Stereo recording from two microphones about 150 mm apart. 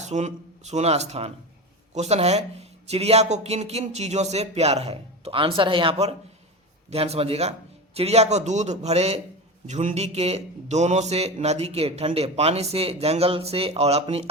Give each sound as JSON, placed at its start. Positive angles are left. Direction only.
{"t": 0.0, "sound": "a man's voice", "side_deg": -50}